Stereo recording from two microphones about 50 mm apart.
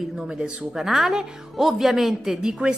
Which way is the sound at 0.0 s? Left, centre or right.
Centre.